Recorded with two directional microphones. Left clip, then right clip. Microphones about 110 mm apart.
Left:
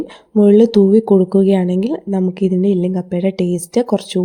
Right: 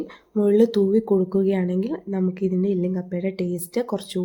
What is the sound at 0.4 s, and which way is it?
Speech, 60° left (ahead or behind).